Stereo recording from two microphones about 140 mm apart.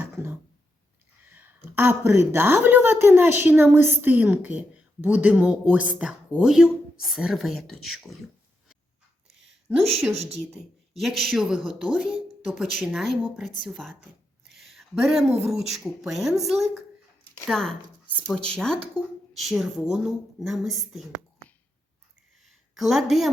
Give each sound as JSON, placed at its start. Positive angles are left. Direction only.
{"t": 0.0, "sound": "a sound", "side_deg": -20}
{"t": 1.2, "sound": "speech", "side_deg": -15}
{"t": 9.7, "sound": "speech", "side_deg": -15}
{"t": 10.9, "sound": "speech", "side_deg": 0}
{"t": 14.5, "sound": "a sound", "side_deg": 0}
{"t": 15.4, "sound": "speech", "side_deg": 0}
{"t": 22.4, "sound": "a woman's voice", "side_deg": 0}